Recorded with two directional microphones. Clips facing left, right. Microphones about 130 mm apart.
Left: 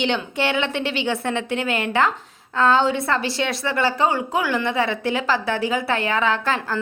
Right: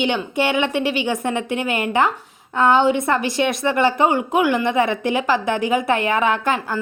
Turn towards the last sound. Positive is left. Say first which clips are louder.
# right 2 dB
turn(degrees=-15)  # may be behind; listen again after turning